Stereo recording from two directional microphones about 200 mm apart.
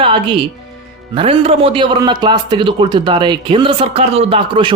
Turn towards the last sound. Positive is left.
turn(degrees=-25)  # may be behind; listen again after turning